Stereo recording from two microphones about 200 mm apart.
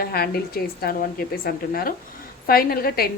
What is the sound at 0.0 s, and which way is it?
A woman's voice, 50° left (ahead or behind).